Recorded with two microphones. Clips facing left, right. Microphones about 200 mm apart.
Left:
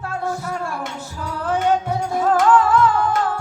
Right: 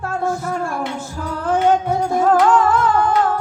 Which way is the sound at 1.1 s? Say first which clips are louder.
Right 3 dB; 50° right (ahead or behind).